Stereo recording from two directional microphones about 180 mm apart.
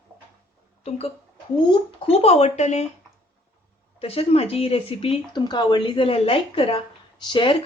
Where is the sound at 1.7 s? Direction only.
30° left (ahead or behind).